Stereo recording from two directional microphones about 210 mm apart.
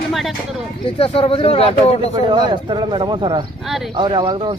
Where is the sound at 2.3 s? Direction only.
20° right (ahead or behind).